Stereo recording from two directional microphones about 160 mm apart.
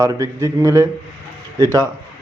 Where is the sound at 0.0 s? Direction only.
20° right (ahead or behind).